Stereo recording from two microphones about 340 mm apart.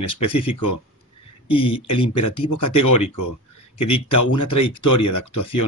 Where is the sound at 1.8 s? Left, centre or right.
Left.